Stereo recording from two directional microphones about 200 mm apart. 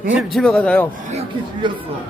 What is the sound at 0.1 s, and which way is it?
Speech, centre (ahead or behind).